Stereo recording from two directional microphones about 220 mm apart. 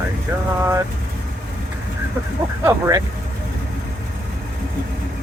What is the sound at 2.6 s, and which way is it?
Speech, 15° right (ahead or behind).